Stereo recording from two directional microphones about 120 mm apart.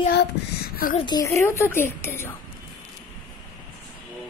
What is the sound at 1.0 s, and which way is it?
Speech, 35° left (ahead or behind).